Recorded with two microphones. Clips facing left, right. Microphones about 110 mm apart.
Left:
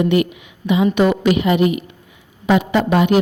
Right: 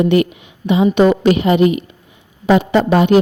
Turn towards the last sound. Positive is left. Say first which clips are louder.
# right 3 dB
turn(degrees=-30)  # may be behind; listen again after turning